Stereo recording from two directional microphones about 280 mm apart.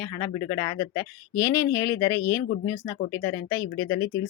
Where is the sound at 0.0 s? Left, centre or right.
Centre.